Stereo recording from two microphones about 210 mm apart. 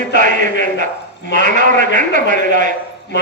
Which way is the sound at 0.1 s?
40° right (ahead or behind).